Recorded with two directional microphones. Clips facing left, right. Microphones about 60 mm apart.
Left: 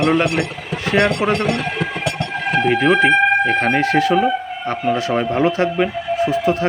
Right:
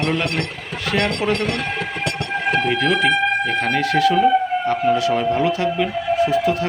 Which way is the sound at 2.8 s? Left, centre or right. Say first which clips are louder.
Left 4 dB; left.